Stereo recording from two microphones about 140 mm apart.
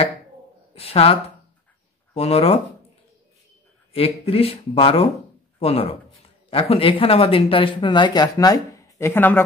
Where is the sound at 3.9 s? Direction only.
45° left (ahead or behind).